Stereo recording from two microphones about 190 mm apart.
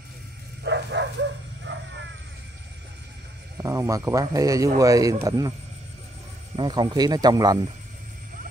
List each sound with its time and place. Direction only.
0.7 s bow-wow: 65° right (ahead or behind)
1.7 s crow: 70° right (ahead or behind)
3.6 s speech: 15° right (ahead or behind)
6.5 s speech: 25° right (ahead or behind)